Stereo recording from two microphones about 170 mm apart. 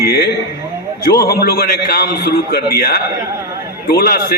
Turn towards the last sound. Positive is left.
turn(degrees=65)  # may be behind; listen again after turning